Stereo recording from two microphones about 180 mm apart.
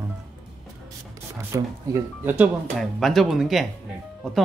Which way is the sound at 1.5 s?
10° right (ahead or behind).